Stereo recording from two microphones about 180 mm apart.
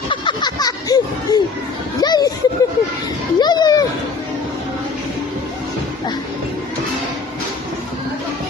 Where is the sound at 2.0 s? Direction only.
20° left (ahead or behind).